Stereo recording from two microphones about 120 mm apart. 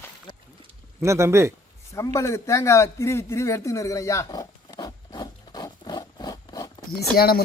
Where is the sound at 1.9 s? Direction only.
25° left (ahead or behind).